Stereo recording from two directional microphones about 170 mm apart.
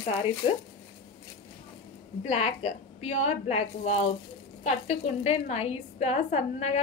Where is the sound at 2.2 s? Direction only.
40° left (ahead or behind).